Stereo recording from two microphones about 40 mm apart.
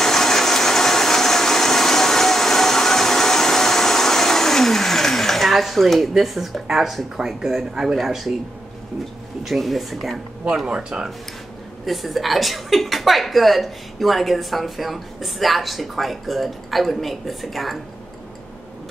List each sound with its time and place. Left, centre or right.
0.0 s a sound: centre
6.1 s a woman's voice: centre
9.4 s a woman's voice: centre
10.4 s speech: centre
11.8 s a woman's voice: centre